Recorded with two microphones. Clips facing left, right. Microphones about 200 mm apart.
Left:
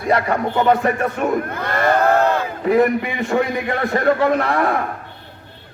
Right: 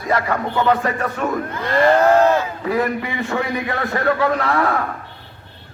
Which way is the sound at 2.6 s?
20° left (ahead or behind).